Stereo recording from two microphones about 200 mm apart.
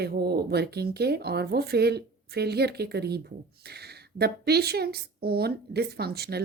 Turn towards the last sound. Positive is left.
turn(degrees=-50)  # may be behind; listen again after turning